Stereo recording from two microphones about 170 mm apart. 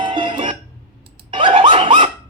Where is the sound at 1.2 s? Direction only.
30° right (ahead or behind).